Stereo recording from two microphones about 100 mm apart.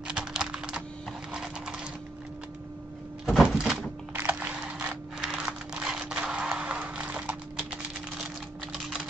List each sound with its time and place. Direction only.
0.1 s computer keyboard: 10° right (ahead or behind)
1.3 s clip-clop: 10° right (ahead or behind)
3.3 s door: 5° right (ahead or behind)
4.1 s a sound: 20° right (ahead or behind)